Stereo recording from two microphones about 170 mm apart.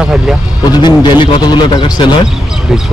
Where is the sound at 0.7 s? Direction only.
25° left (ahead or behind).